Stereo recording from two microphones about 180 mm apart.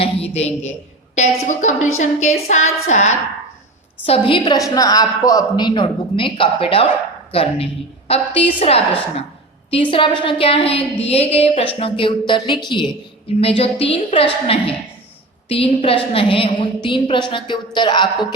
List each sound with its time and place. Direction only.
0.0 s a woman's voice: 35° left (ahead or behind)
4.3 s a woman's voice: 25° left (ahead or behind)